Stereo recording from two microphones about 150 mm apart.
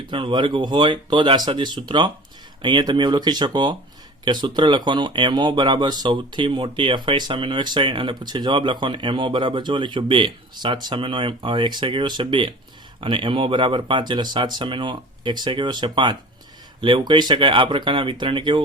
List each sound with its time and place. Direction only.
0.1 s speech: 35° right (ahead or behind)